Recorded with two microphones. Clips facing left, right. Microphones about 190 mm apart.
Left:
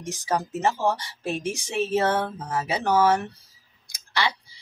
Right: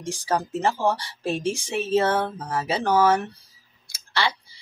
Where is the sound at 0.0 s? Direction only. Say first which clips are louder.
Right 1 dB; 30° right (ahead or behind).